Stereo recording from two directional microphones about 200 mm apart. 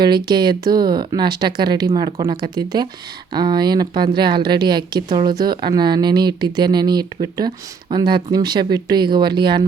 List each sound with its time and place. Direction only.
0.0 s a woman's voice: 20° right (ahead or behind)